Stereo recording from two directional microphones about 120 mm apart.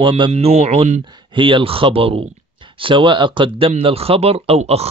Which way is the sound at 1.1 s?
45° right (ahead or behind).